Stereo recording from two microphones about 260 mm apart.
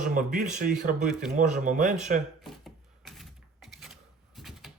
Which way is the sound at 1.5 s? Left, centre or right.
Right.